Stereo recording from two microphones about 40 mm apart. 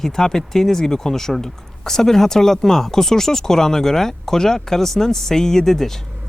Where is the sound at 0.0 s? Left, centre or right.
Centre.